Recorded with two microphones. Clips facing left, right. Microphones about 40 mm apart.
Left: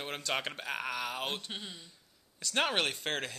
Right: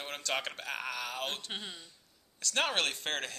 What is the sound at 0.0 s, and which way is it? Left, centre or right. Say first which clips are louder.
Speech: left 1 dB; centre.